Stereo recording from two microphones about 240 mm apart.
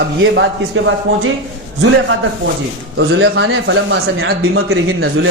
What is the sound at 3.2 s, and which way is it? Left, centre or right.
Speech, right.